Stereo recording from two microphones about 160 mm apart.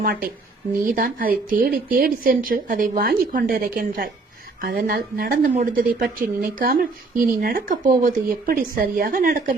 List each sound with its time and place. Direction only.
0.0 s a woman's voice: 65° right (ahead or behind)